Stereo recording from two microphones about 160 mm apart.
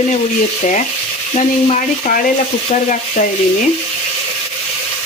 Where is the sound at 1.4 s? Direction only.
50° left (ahead or behind).